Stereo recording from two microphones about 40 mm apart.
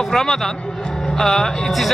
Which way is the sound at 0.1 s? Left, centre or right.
Centre.